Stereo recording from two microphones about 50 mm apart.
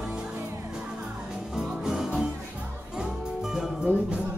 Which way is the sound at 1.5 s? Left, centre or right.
Centre.